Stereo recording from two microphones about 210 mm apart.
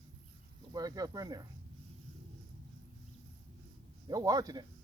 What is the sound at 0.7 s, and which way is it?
Speech, 15° right (ahead or behind).